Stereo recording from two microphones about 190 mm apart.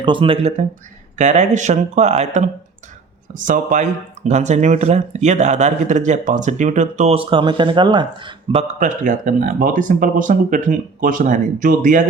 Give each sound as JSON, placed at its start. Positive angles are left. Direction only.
{"t": 0.0, "sound": "speech", "side_deg": -25}
{"t": 8.8, "sound": "speech", "side_deg": -40}